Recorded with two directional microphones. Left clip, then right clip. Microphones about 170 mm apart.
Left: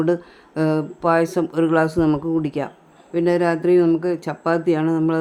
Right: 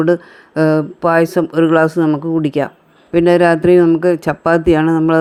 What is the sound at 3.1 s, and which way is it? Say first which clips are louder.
Speech: right 8 dB; 35° right (ahead or behind).